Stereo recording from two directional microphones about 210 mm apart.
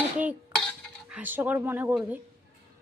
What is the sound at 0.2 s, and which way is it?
Cutlery, 5° right (ahead or behind).